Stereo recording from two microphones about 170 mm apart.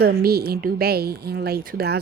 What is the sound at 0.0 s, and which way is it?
Speech, 65° right (ahead or behind).